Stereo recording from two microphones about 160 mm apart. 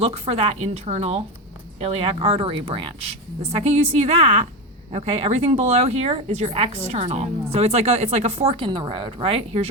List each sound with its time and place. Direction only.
0.0 s speech: 40° right (ahead or behind)